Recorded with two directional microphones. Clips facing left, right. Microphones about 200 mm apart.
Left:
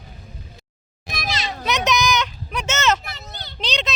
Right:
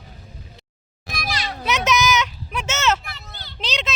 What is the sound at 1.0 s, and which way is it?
Children playing, 20° left (ahead or behind).